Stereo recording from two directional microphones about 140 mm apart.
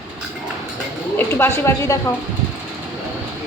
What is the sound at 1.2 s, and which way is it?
Speech, 15° left (ahead or behind).